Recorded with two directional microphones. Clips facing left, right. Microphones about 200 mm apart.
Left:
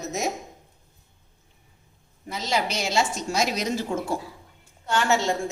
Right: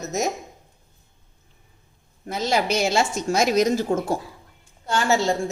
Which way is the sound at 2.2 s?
50° right (ahead or behind).